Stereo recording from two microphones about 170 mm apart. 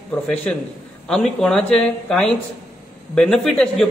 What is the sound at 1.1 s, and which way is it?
A man's voice, 5° left (ahead or behind).